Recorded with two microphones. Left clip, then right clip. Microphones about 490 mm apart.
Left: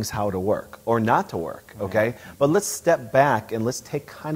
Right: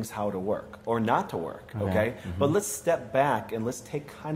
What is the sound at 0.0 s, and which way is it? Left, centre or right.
Speech, left.